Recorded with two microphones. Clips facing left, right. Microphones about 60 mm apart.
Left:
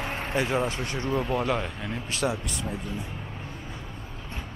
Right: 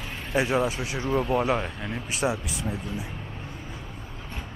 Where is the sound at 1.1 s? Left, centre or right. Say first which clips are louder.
Right 3 dB; right.